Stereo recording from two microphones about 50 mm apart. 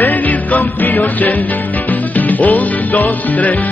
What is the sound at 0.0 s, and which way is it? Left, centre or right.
Music, left.